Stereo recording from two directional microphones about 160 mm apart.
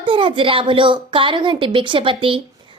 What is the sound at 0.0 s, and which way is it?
A woman's voice, 30° right (ahead or behind).